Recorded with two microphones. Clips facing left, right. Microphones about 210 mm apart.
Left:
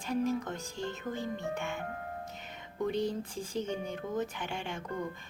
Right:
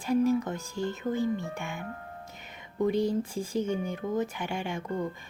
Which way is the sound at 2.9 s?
10° right (ahead or behind).